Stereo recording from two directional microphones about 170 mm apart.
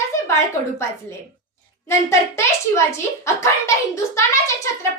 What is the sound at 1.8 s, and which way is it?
A child's voice, 15° left (ahead or behind).